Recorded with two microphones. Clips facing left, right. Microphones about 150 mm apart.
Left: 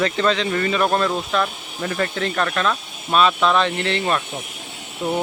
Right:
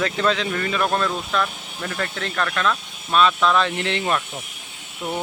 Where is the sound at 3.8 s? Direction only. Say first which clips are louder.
Left 2 dB; 15° right (ahead or behind).